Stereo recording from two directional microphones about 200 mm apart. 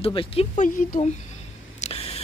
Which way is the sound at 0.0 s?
25° left (ahead or behind).